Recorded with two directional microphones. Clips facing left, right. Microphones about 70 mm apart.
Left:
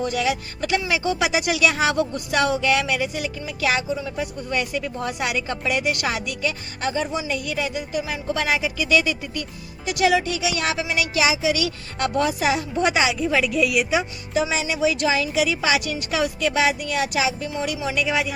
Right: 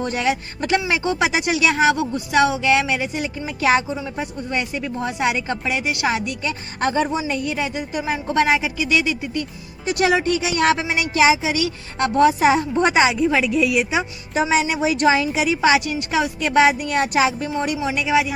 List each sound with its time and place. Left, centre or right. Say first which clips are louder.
0.0 s a woman's voice: right 2 dB; right
3.9 s speech: right 1 dB; right
10.8 s a woman's voice: right 5 dB; right
13.1 s a woman's voice: right 3 dB; centre
14.3 s a woman's voice: right 4 dB; right
17.8 s speech: right 4 dB; right